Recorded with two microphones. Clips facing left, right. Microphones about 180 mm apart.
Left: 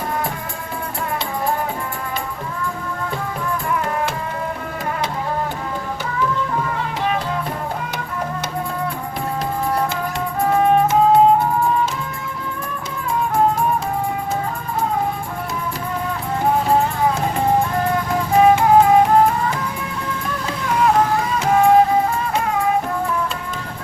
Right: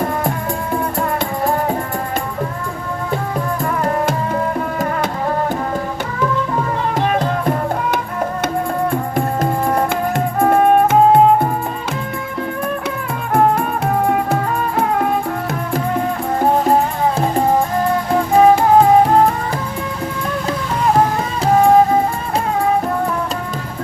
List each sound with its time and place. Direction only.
7.1 s music: 50° right (ahead or behind)
10.4 s music: 55° right (ahead or behind)
13.1 s music: 60° right (ahead or behind)
18.3 s music: 35° right (ahead or behind)